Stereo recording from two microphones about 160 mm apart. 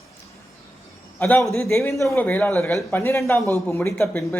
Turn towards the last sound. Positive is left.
turn(degrees=10)  # may be behind; listen again after turning